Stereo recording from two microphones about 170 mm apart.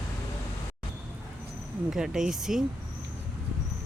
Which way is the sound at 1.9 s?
5° right (ahead or behind).